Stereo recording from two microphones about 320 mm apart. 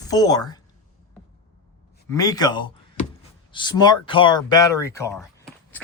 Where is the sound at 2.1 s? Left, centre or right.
Centre.